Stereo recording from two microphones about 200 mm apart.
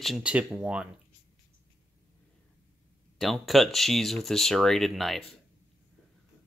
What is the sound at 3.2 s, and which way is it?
Speech, centre (ahead or behind).